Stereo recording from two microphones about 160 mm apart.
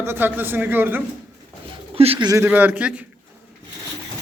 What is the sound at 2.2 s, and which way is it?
Speech, 15° right (ahead or behind).